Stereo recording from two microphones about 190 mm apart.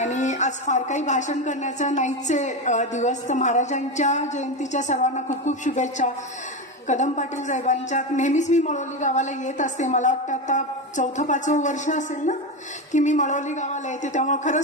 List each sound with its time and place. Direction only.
0.0 s a woman's voice: 40° left (ahead or behind)